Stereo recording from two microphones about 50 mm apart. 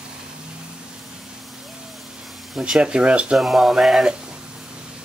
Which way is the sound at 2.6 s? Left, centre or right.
Centre.